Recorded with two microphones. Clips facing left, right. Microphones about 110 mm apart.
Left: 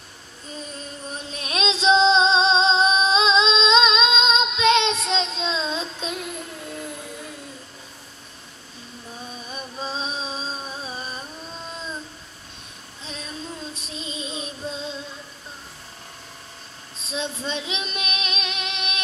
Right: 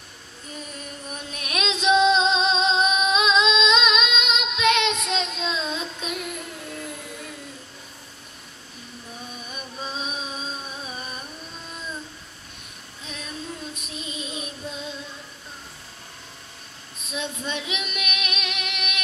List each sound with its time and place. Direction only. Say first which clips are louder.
0.7 s female singing: left 2 dB; 30° left (ahead or behind)
9.5 s a sound: left 3 dB; 30° left (ahead or behind)
13.7 s female singing: left 1 dB; 30° left (ahead or behind)
17.0 s child singing: left 2 dB; 30° left (ahead or behind)